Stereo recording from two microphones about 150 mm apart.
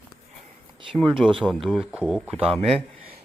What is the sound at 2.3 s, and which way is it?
Speech, 40° right (ahead or behind).